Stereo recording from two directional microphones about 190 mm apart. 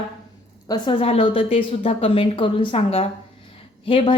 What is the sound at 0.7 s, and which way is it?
A woman's voice, 30° left (ahead or behind).